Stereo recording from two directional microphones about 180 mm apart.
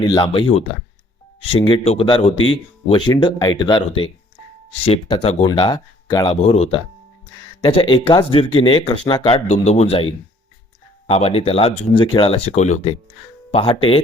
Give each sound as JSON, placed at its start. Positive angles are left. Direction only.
{"t": 0.0, "sound": "speech", "side_deg": 25}
{"t": 6.5, "sound": "speech", "side_deg": 35}